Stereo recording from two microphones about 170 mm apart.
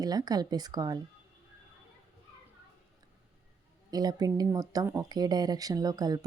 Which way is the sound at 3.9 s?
25° right (ahead or behind).